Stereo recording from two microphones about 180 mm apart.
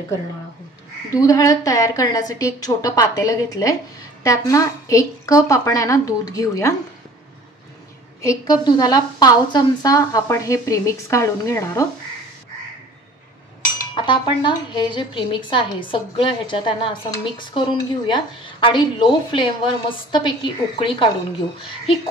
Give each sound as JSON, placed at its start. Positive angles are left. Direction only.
{"t": 1.1, "sound": "a woman's voice", "side_deg": 20}
{"t": 8.2, "sound": "a woman's voice", "side_deg": 20}
{"t": 13.9, "sound": "speech", "side_deg": 25}